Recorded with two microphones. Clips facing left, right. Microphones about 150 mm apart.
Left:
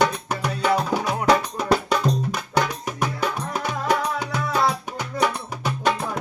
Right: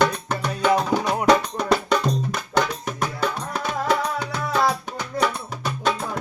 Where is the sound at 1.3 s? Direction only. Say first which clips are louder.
Right 1 dB; 5° left (ahead or behind).